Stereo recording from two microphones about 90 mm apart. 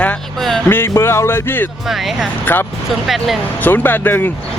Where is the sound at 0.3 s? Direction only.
5° left (ahead or behind).